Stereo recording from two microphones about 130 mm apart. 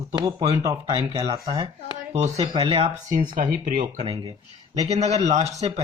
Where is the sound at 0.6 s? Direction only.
25° right (ahead or behind).